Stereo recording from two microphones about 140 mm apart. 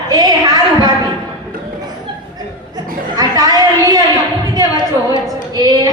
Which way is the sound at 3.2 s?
30° right (ahead or behind).